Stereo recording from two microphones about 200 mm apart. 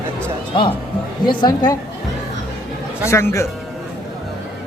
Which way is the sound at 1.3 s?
20° left (ahead or behind).